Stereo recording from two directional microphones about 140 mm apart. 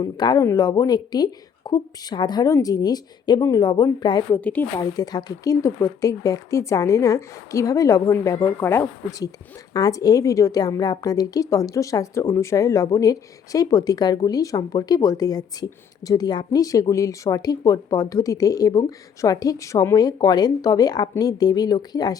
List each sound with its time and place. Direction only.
0.0 s a woman's voice: 30° left (ahead or behind)
4.4 s a woman's voice: 10° left (ahead or behind)
4.8 s a woman's voice: 25° left (ahead or behind)